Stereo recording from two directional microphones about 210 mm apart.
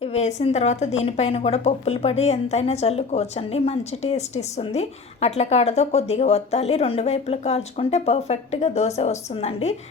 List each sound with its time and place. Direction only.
0.0 s a woman's voice: 30° left (ahead or behind)